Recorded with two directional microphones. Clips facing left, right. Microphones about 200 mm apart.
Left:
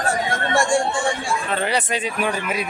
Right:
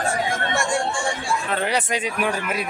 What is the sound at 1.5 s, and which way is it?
Speech, 5° right (ahead or behind).